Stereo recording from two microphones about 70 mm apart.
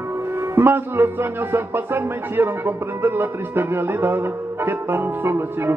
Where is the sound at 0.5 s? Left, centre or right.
Right.